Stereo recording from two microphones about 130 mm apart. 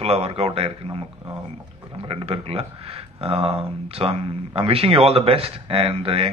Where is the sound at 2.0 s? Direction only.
45° right (ahead or behind).